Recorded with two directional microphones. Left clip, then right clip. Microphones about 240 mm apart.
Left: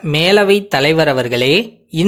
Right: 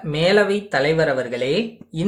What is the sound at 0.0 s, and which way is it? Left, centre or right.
Speech, left.